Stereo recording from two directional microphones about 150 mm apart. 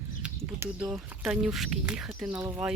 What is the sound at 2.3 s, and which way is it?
Speech, 20° right (ahead or behind).